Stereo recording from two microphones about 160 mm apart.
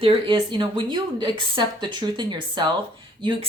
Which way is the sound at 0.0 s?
30° right (ahead or behind).